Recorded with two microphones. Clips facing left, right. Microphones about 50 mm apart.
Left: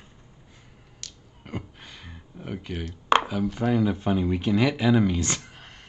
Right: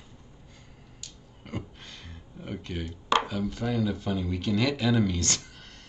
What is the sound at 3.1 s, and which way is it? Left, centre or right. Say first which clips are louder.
Chopping: left 4 dB; left.